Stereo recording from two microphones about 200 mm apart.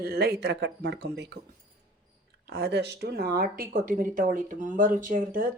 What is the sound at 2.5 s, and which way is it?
Speech, 55° right (ahead or behind).